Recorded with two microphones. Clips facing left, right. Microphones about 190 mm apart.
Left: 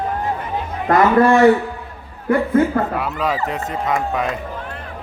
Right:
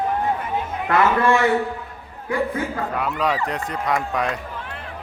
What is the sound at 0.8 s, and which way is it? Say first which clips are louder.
Speech: left 5 dB; 40° left (ahead or behind).